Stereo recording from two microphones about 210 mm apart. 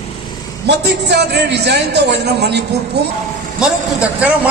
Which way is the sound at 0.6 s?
55° right (ahead or behind).